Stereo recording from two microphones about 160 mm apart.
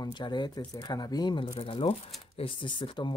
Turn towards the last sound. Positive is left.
turn(degrees=30)  # may be behind; listen again after turning